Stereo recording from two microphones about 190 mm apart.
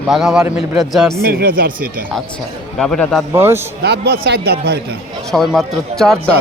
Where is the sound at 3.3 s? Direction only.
15° right (ahead or behind).